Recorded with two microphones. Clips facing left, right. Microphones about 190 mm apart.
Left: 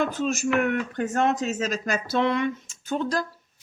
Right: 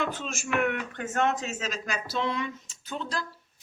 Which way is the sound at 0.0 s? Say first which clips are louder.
Left 8 dB; 40° left (ahead or behind).